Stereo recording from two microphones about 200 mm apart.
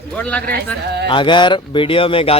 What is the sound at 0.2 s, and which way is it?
Speech, 5° left (ahead or behind).